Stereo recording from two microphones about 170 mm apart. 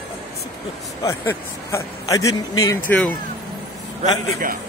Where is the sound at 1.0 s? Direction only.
15° left (ahead or behind).